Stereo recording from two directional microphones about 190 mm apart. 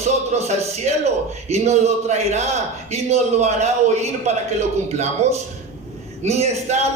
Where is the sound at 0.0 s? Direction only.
35° right (ahead or behind).